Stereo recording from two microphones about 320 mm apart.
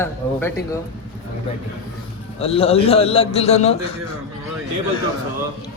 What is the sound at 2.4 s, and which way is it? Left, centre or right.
A man's voice, centre.